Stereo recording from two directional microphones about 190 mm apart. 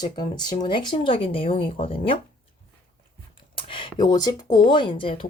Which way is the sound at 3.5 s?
25° left (ahead or behind).